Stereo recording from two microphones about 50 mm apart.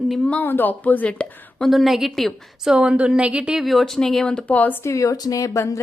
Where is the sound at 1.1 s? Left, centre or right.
Left.